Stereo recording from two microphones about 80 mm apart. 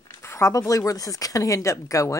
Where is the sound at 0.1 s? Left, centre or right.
Left.